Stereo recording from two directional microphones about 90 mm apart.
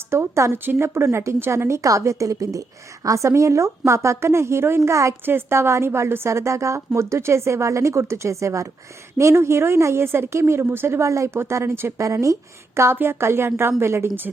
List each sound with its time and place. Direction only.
0.1 s a woman's voice: 30° right (ahead or behind)